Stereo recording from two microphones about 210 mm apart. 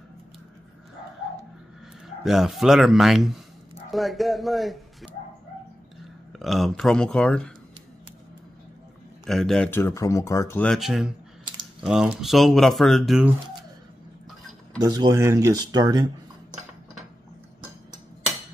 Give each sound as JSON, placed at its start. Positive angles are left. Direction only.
{"t": 2.0, "sound": "speech", "side_deg": 0}
{"t": 6.3, "sound": "speech", "side_deg": 0}
{"t": 9.2, "sound": "speech", "side_deg": 0}
{"t": 14.8, "sound": "speech", "side_deg": -20}